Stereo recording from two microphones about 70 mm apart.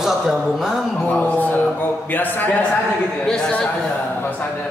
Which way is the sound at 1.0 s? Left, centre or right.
Left.